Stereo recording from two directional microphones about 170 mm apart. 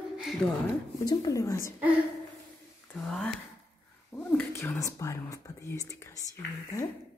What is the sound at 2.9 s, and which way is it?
Speech, 5° left (ahead or behind).